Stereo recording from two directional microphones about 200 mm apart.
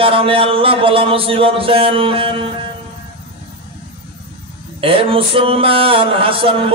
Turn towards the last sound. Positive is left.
turn(degrees=-25)  # may be behind; listen again after turning